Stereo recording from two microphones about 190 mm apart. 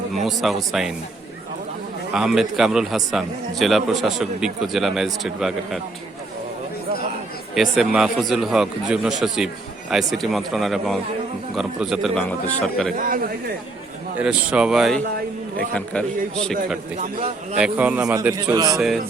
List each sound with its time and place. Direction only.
0.2 s a man's voice: centre (ahead or behind)
2.1 s a man's voice: centre (ahead or behind)
7.5 s a man's voice: centre (ahead or behind)
13.0 s speech: 45° right (ahead or behind)
14.2 s a man's voice: 5° right (ahead or behind)
17.0 s a man's voice: 35° right (ahead or behind)
17.6 s a man's voice: 5° right (ahead or behind)